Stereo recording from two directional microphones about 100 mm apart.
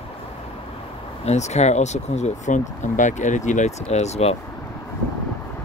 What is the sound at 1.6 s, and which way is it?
Speech, 90° left.